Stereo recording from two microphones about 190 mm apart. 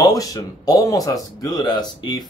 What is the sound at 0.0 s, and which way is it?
Speech, 20° left (ahead or behind).